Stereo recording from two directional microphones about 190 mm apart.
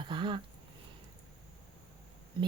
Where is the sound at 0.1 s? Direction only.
25° right (ahead or behind).